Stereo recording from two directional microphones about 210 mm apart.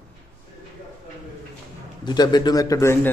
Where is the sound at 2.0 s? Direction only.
20° left (ahead or behind).